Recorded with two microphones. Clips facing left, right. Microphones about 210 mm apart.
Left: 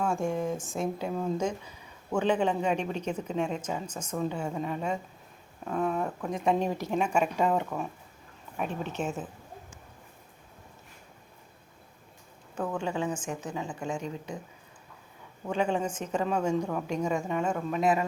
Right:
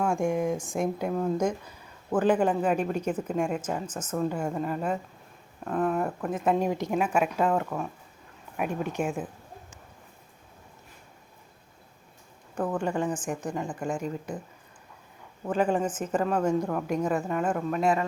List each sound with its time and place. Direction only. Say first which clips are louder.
0.0 s speech: right 3 dB; 15° right (ahead or behind)
3.8 s speech: right 3 dB; 10° left (ahead or behind)
4.1 s speech: right 3 dB; 5° right (ahead or behind)
6.7 s speech: right 2 dB; 15° right (ahead or behind)
7.0 s speech: even; 5° right (ahead or behind)
8.5 s speech: right 3 dB; 10° right (ahead or behind)
12.6 s speech: right 3 dB; 5° right (ahead or behind)
15.4 s speech: right 3 dB; 5° right (ahead or behind)
16.4 s speech: right 2 dB; 10° left (ahead or behind)
16.6 s speech: right 3 dB; 5° right (ahead or behind)